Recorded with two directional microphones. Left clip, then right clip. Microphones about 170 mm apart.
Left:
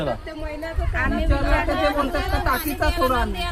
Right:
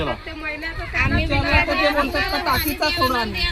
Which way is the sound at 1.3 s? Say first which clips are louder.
Right 4 dB; 50° right (ahead or behind).